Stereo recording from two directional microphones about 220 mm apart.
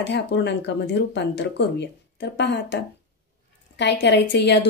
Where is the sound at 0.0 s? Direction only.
55° left (ahead or behind).